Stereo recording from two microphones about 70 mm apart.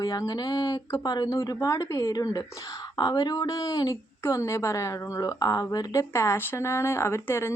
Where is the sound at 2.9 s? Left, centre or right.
Left.